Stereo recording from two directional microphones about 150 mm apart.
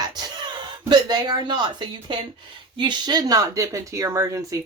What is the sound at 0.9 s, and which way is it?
Speech, 25° right (ahead or behind).